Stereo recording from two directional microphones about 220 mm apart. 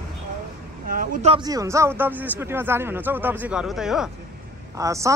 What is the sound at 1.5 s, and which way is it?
Speech, 15° right (ahead or behind).